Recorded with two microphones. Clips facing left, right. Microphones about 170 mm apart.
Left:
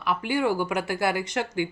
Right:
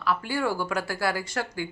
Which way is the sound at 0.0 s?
20° left (ahead or behind).